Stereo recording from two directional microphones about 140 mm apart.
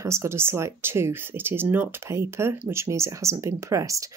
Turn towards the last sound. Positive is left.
turn(degrees=-25)  # may be behind; listen again after turning